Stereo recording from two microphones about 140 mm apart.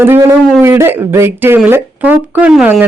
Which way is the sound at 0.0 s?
15° right (ahead or behind).